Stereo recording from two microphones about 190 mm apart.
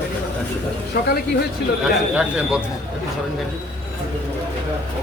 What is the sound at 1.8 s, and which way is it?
Speech, 5° right (ahead or behind).